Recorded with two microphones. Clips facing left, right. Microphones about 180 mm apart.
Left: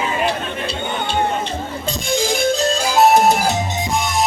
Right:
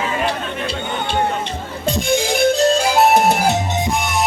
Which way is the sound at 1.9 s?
60° right (ahead or behind).